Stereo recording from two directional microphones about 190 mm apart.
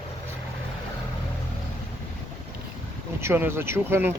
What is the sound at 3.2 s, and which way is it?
Speech, 10° right (ahead or behind).